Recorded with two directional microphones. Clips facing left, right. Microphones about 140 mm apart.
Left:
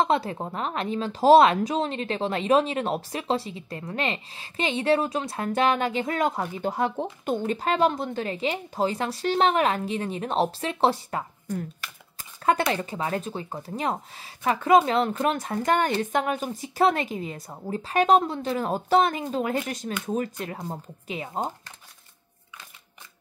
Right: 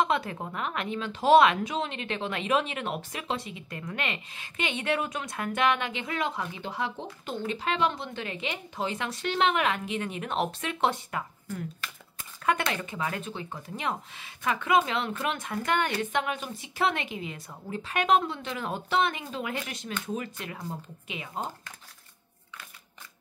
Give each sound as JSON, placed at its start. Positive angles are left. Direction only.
{"t": 0.0, "sound": "speech", "side_deg": 30}
{"t": 12.7, "sound": "speech", "side_deg": 35}